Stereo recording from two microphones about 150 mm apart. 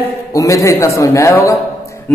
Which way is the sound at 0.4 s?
20° left (ahead or behind).